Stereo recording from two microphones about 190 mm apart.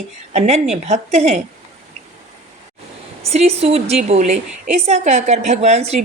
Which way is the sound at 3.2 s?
35° right (ahead or behind).